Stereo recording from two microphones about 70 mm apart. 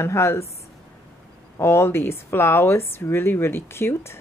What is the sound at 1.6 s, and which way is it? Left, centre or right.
Speech, left.